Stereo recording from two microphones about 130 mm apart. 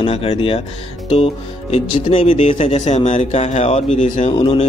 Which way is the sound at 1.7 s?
45° left (ahead or behind).